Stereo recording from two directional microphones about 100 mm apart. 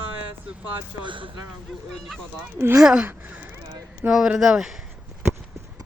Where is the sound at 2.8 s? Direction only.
10° right (ahead or behind).